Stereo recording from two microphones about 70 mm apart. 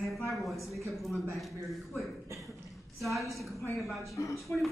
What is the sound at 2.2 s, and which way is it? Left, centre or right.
Cough, right.